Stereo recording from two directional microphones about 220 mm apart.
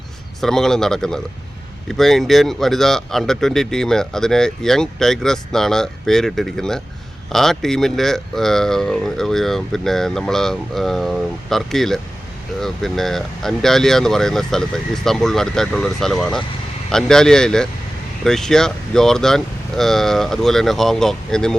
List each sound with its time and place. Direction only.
0.4 s speech: centre (ahead or behind)